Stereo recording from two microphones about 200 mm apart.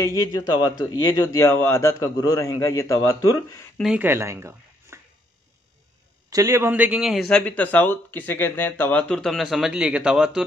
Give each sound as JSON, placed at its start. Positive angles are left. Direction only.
{"t": 0.0, "sound": "a man's voice", "side_deg": 15}
{"t": 3.7, "sound": "speech", "side_deg": -5}
{"t": 6.3, "sound": "a man's voice", "side_deg": -15}